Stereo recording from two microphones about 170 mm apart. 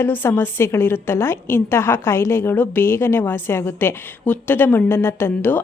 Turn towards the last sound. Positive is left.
turn(degrees=10)  # may be behind; listen again after turning